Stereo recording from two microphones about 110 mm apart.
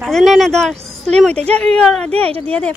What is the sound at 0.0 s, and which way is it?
A woman's voice, centre (ahead or behind).